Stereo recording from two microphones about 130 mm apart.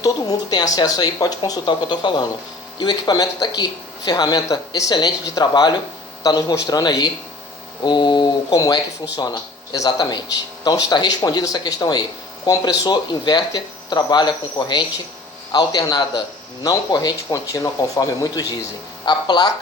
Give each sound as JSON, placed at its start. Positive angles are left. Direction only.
{"t": 0.0, "sound": "speech", "side_deg": 30}